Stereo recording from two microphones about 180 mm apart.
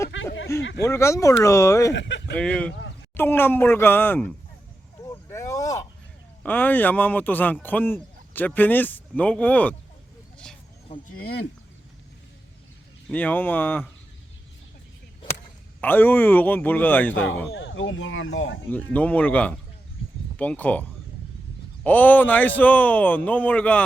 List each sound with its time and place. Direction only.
0.1 s a sound: 90° left
0.6 s speech: 80° left
0.9 s a man's voice: 15° left (ahead or behind)
1.9 s speech: 75° left (ahead or behind)
2.3 s a man's voice: 5° left (ahead or behind)
5.0 s a sound: 15° left (ahead or behind)
6.4 s a man's voice: 10° left (ahead or behind)
10.3 s a sound: 5° left (ahead or behind)
11.2 s speech: 60° left (ahead or behind)
13.1 s a man's voice: 10° left (ahead or behind)
15.8 s a man's voice: 10° left (ahead or behind)
17.5 s speech: 90° left
18.7 s a man's voice: 10° left (ahead or behind)
21.8 s a man's voice: 10° left (ahead or behind)